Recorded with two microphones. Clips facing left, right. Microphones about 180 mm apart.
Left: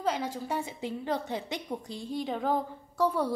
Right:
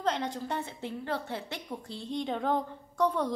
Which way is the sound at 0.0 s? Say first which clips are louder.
Even; 5° left (ahead or behind).